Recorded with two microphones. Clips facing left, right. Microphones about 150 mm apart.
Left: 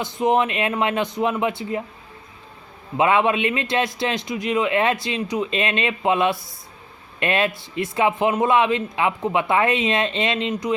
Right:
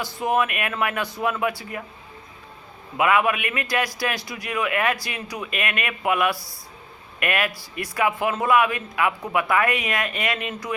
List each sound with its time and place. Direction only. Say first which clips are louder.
0.0 s a man's voice: left 3 dB; 20° left (ahead or behind)
3.0 s a man's voice: left 3 dB; 25° left (ahead or behind)